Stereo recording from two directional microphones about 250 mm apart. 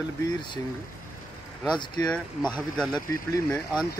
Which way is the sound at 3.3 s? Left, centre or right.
Centre.